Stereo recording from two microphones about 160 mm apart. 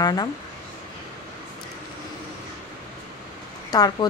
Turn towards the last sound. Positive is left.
turn(degrees=25)  # may be behind; listen again after turning